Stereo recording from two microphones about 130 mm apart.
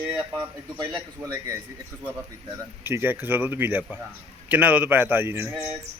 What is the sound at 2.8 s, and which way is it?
A man's voice, 15° right (ahead or behind).